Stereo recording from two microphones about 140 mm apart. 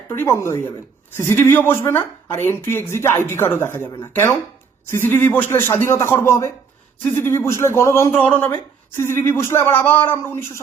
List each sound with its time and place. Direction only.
0.2 s a woman's voice: 20° left (ahead or behind)